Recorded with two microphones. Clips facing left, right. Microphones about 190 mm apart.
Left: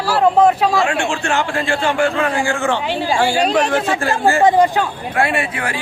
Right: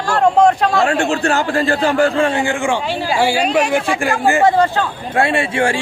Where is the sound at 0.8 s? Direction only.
35° right (ahead or behind); by 4.4 s 15° right (ahead or behind).